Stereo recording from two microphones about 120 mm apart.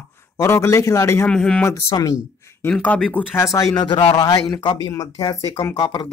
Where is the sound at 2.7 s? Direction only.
15° left (ahead or behind).